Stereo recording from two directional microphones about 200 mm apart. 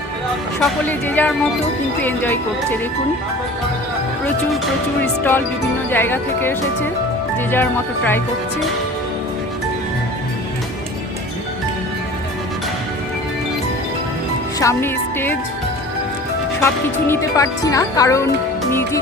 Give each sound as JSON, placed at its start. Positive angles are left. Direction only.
{"t": 0.6, "sound": "speech", "side_deg": 10}
{"t": 5.9, "sound": "speech", "side_deg": 10}
{"t": 14.6, "sound": "speech", "side_deg": 15}
{"t": 16.6, "sound": "speech", "side_deg": 10}